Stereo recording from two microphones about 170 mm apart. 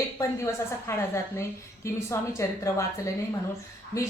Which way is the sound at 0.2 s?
15° left (ahead or behind).